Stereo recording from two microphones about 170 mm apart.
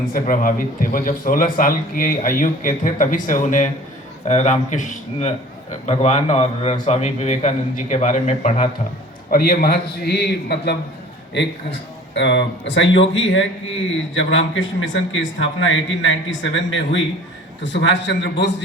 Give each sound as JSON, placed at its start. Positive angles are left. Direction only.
{"t": 0.1, "sound": "a man's voice", "side_deg": 55}
{"t": 9.3, "sound": "a man's voice", "side_deg": 60}
{"t": 11.3, "sound": "speech", "side_deg": 90}